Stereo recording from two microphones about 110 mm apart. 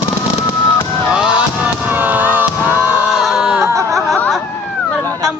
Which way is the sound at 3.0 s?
Centre (ahead or behind).